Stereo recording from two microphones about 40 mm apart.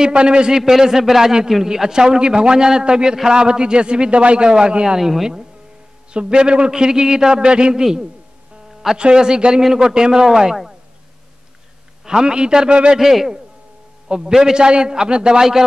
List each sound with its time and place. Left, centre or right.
0.0 s a man's voice: right
4.9 s speech: centre
6.1 s a man's voice: right
8.9 s a man's voice: right
12.0 s a man's voice: centre
12.9 s speech: centre
14.0 s a man's voice: right